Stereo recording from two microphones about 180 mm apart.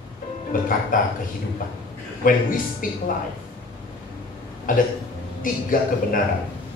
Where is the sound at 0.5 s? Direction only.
50° left (ahead or behind).